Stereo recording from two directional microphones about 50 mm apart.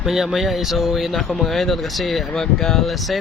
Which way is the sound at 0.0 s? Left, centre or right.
Centre.